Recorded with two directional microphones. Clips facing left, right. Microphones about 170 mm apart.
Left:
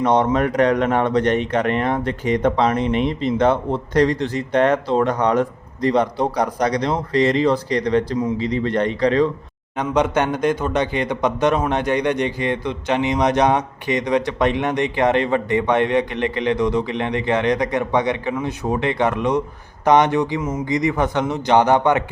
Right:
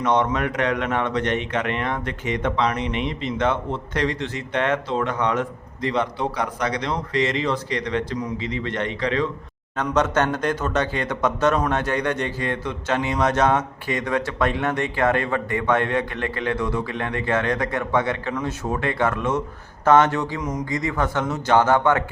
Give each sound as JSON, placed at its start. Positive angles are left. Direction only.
{"t": 0.0, "sound": "speech", "side_deg": 35}
{"t": 9.9, "sound": "a man's voice", "side_deg": 15}
{"t": 20.4, "sound": "a man's voice", "side_deg": 5}
{"t": 20.7, "sound": "a man's voice", "side_deg": 20}